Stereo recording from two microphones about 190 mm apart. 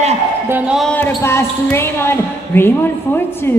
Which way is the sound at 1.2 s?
15° left (ahead or behind).